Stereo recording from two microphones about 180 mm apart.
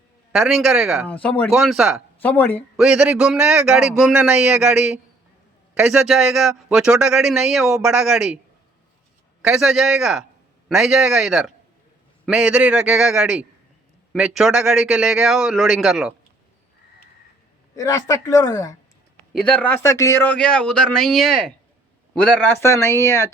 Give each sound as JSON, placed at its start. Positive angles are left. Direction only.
{"t": 0.3, "sound": "a man's voice", "side_deg": 0}
{"t": 2.2, "sound": "speech", "side_deg": 10}
{"t": 2.7, "sound": "a man's voice", "side_deg": -5}
{"t": 9.4, "sound": "a man's voice", "side_deg": -5}
{"t": 17.7, "sound": "a woman's voice", "side_deg": 20}
{"t": 19.3, "sound": "a man's voice", "side_deg": 5}
{"t": 22.6, "sound": "speech", "side_deg": 15}